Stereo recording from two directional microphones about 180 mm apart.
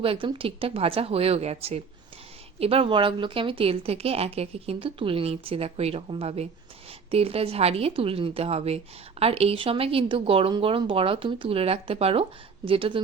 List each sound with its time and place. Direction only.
0.0 s a woman's voice: 30° right (ahead or behind)